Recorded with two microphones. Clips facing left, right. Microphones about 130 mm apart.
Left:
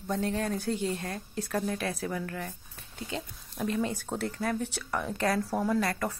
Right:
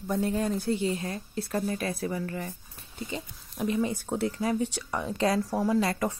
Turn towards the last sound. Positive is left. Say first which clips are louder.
# right 3 dB
turn(degrees=-15)  # may be behind; listen again after turning